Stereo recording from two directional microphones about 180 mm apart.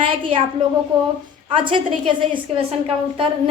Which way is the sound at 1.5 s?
30° right (ahead or behind).